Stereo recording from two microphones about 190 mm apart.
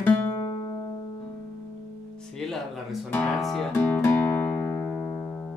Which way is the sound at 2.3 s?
Centre (ahead or behind).